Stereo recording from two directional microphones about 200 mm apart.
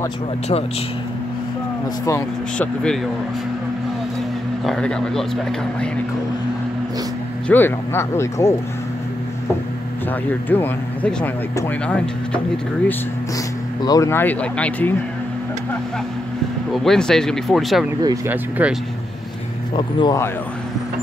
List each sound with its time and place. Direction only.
2.0 s speech: 15° left (ahead or behind)
4.6 s speech: 5° left (ahead or behind)
7.4 s speech: 10° left (ahead or behind)
10.5 s speech: 10° left (ahead or behind)
13.8 s speech: 15° left (ahead or behind)
16.7 s speech: centre (ahead or behind)
18.0 s speech: 15° right (ahead or behind)
19.7 s speech: 25° left (ahead or behind)